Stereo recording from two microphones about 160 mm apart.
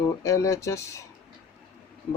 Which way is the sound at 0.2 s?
20° left (ahead or behind).